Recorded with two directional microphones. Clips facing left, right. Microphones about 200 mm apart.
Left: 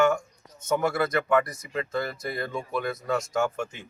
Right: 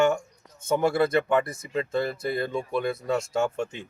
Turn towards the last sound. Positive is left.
turn(degrees=-25)  # may be behind; listen again after turning